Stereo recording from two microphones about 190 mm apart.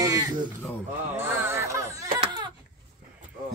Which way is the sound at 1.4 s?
15° right (ahead or behind).